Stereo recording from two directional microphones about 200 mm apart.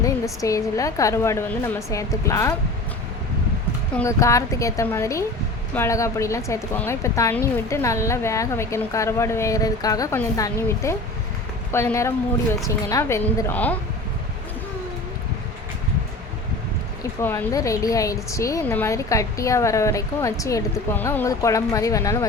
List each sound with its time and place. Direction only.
0.0 s speech: 15° left (ahead or behind)
3.9 s speech: 15° left (ahead or behind)
17.2 s speech: 10° left (ahead or behind)